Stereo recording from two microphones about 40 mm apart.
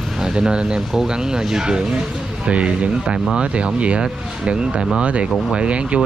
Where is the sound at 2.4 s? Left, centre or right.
Right.